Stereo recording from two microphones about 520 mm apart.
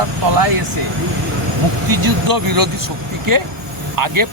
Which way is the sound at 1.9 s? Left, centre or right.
Right.